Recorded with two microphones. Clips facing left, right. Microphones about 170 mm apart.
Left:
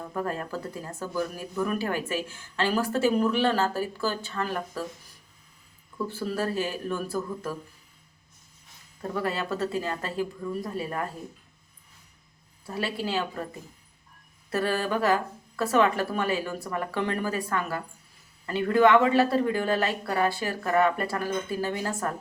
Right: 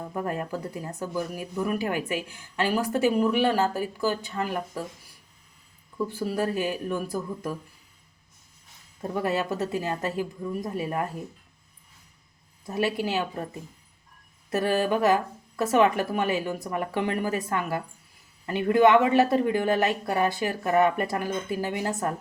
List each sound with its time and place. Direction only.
0.1 s speech: 15° right (ahead or behind)
6.1 s speech: 15° right (ahead or behind)
9.0 s speech: 20° right (ahead or behind)
12.6 s speech: 20° right (ahead or behind)
14.5 s speech: 20° right (ahead or behind)